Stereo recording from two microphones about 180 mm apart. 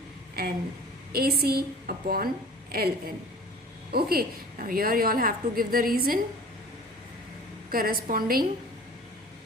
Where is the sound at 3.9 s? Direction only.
55° right (ahead or behind).